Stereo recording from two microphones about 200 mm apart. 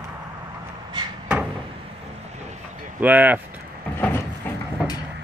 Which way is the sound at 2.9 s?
10° right (ahead or behind).